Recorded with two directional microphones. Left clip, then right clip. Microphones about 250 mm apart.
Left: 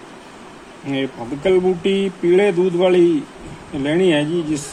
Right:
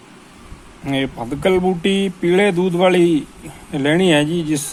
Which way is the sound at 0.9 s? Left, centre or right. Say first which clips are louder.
Right 2 dB; right.